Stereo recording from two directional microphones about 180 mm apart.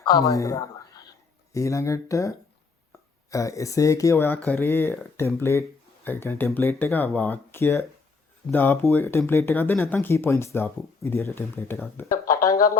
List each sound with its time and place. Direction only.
0.0 s a woman's voice: 20° left (ahead or behind)